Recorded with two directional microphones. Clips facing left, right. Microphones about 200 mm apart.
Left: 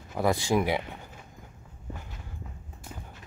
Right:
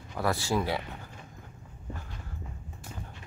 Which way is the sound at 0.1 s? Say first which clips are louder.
Left 4 dB; 20° left (ahead or behind).